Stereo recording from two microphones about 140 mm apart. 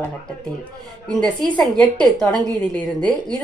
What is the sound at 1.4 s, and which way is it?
A woman's voice, 5° left (ahead or behind).